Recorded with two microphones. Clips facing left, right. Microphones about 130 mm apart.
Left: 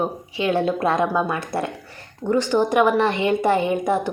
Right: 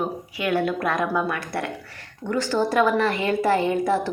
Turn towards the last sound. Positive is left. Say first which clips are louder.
# left 1 dB
turn(degrees=20)  # may be behind; listen again after turning